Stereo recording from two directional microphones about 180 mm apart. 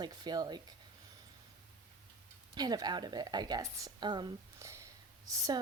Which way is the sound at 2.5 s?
20° right (ahead or behind).